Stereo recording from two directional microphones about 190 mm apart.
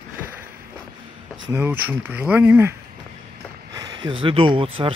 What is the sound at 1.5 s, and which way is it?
Speech, 10° right (ahead or behind).